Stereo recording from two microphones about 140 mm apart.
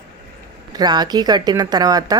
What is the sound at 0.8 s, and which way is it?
A woman's voice, 30° right (ahead or behind).